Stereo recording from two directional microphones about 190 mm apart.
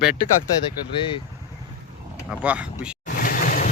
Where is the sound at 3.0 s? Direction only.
45° left (ahead or behind).